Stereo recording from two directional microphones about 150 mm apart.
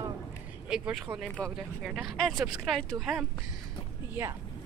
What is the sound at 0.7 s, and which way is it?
Speech, 5° right (ahead or behind).